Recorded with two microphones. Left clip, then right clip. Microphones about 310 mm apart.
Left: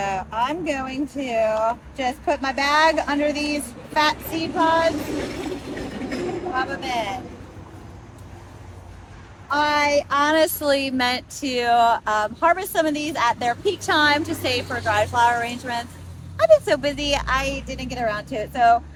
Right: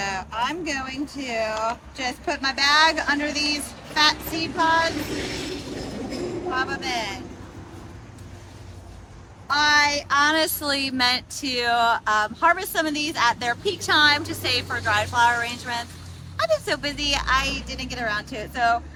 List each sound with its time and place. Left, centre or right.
0.0 s speech: centre
5.2 s a sound: centre
6.6 s speech: centre
9.5 s speech: centre